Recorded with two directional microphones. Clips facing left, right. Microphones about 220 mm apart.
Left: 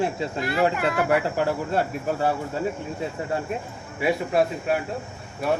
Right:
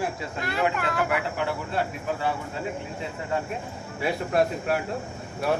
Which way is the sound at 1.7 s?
45° left (ahead or behind).